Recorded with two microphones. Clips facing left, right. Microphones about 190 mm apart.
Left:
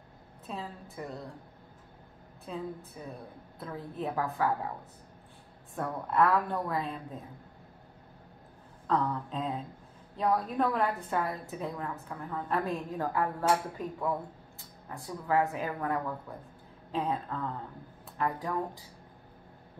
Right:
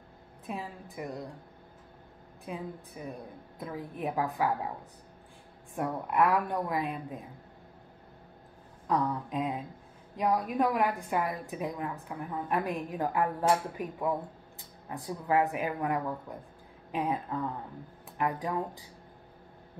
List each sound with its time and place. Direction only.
0.5 s a woman's voice: 15° right (ahead or behind)
2.4 s a woman's voice: 15° right (ahead or behind)
5.8 s a woman's voice: 15° right (ahead or behind)
8.8 s a woman's voice: 15° right (ahead or behind)